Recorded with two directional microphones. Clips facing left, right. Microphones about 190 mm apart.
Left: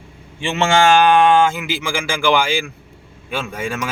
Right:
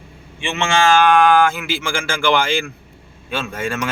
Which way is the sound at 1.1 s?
30° left (ahead or behind).